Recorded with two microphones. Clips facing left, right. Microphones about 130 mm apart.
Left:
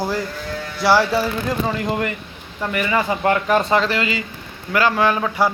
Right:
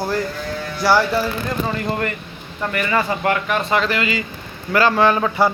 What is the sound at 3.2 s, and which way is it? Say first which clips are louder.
A man's voice: left 3 dB; 30° left (ahead or behind).